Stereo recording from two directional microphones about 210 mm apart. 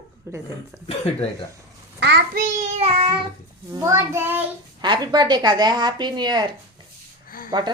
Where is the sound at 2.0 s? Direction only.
50° right (ahead or behind); by 3.2 s 30° right (ahead or behind).